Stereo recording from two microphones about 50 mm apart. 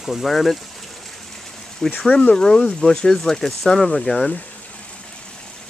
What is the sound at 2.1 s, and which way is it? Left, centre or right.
Speech, left.